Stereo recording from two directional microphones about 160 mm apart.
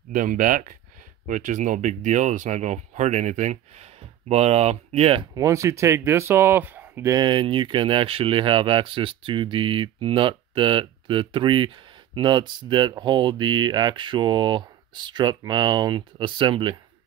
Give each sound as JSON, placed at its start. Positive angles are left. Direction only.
{"t": 0.1, "sound": "speech", "side_deg": -60}
{"t": 5.3, "sound": "speech", "side_deg": -20}
{"t": 7.2, "sound": "speech", "side_deg": -30}